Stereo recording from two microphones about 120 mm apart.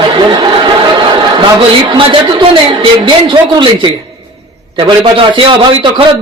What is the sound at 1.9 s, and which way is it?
A man's voice, 45° right (ahead or behind).